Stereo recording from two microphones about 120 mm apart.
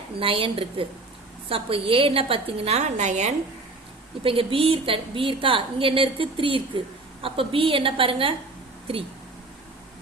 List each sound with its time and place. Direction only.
0.2 s a woman's voice: 50° right (ahead or behind); by 3.3 s 75° right (ahead or behind)
4.2 s a woman's voice: 50° right (ahead or behind)